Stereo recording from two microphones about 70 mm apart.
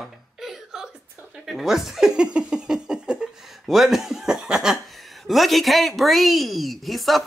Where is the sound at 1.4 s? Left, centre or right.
Centre.